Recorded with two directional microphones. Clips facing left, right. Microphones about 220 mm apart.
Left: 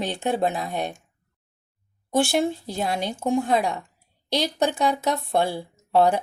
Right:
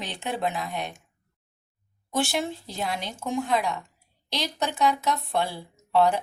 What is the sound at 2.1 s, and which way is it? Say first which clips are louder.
Speech: left 6 dB; 50° left (ahead or behind).